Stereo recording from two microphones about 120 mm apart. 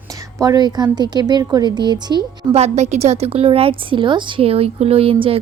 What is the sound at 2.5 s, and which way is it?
A woman's voice, 65° right (ahead or behind).